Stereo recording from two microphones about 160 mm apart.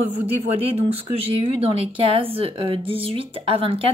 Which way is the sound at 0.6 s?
40° right (ahead or behind).